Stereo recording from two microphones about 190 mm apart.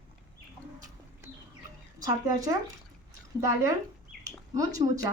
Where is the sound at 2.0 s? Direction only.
15° right (ahead or behind).